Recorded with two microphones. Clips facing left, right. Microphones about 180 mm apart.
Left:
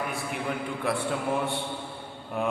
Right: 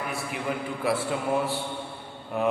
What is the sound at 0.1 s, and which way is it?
Speech, centre (ahead or behind).